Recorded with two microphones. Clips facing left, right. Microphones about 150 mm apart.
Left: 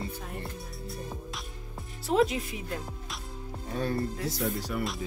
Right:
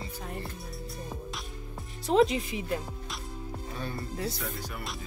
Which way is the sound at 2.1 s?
Centre (ahead or behind).